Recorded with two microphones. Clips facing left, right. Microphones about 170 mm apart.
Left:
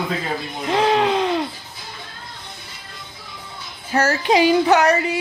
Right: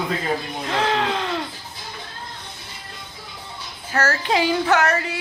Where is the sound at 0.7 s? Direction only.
15° left (ahead or behind).